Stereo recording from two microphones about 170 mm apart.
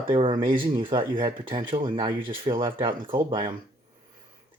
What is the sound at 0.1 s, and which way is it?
Speech, 30° right (ahead or behind).